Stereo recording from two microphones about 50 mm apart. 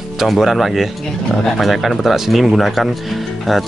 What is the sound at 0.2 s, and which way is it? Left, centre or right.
Speech, centre.